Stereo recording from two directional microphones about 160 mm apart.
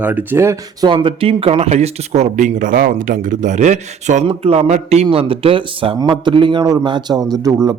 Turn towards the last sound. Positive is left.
turn(degrees=-20)  # may be behind; listen again after turning